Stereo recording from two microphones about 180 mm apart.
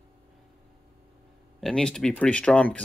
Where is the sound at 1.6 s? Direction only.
5° left (ahead or behind).